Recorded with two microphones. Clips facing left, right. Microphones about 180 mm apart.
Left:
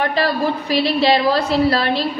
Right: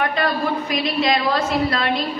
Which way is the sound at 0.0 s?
35° left (ahead or behind).